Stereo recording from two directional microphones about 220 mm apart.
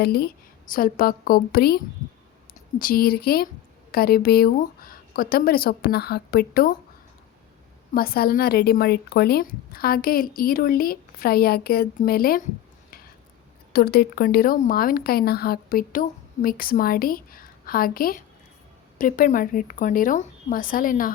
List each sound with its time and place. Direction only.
0.0 s speech: 45° left (ahead or behind)
7.9 s speech: 45° left (ahead or behind)
13.7 s speech: 45° left (ahead or behind)